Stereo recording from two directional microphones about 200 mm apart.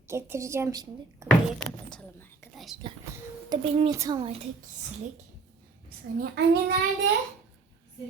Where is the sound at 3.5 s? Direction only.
20° right (ahead or behind).